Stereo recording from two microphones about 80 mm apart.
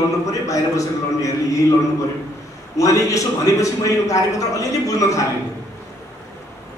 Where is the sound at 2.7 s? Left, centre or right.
Left.